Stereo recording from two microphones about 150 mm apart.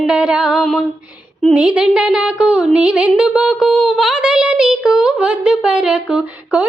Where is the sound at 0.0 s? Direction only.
5° right (ahead or behind).